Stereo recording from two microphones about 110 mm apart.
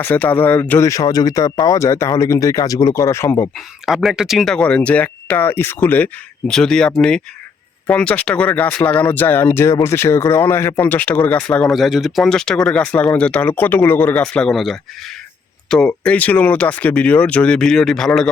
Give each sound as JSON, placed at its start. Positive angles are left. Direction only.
{"t": 0.0, "sound": "speech", "side_deg": 15}
{"t": 0.9, "sound": "speech", "side_deg": 35}
{"t": 3.5, "sound": "speech", "side_deg": 0}
{"t": 6.5, "sound": "speech", "side_deg": 5}
{"t": 14.2, "sound": "speech", "side_deg": 5}